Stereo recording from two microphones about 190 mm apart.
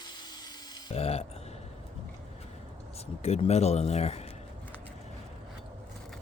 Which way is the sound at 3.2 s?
35° left (ahead or behind).